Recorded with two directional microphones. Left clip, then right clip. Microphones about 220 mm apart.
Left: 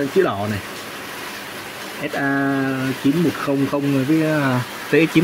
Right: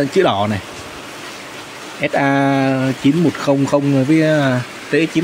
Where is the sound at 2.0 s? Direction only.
25° right (ahead or behind).